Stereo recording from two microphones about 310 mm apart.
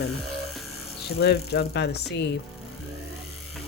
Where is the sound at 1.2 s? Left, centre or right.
Left.